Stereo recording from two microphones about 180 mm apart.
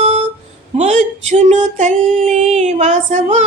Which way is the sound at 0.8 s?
40° right (ahead or behind).